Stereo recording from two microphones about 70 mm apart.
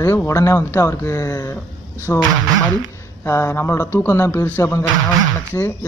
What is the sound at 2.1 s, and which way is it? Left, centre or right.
Speech, centre.